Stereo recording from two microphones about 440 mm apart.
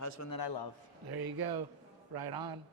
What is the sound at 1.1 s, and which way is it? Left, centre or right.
Speech, right.